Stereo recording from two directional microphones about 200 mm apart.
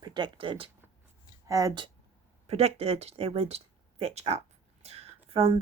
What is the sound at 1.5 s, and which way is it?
Speech, 15° right (ahead or behind).